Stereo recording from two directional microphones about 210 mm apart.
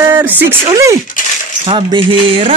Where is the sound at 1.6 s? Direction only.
25° right (ahead or behind).